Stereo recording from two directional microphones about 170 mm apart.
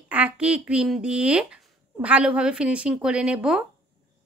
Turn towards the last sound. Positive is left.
turn(degrees=-5)  # may be behind; listen again after turning